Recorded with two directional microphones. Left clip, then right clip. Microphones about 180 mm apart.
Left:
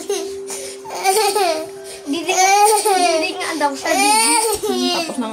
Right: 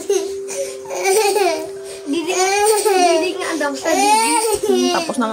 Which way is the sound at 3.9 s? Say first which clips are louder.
Right 2 dB; 15° left (ahead or behind).